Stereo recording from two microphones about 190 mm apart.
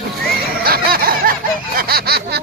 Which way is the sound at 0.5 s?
50° right (ahead or behind).